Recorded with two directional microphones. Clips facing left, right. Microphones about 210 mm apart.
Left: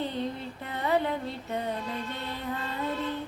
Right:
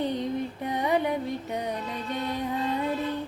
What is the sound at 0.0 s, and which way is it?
Music, 15° right (ahead or behind).